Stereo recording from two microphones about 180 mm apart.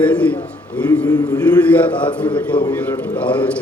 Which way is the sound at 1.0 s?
20° left (ahead or behind).